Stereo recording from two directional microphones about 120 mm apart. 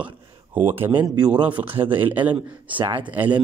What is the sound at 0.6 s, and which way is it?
Speech, 15° right (ahead or behind).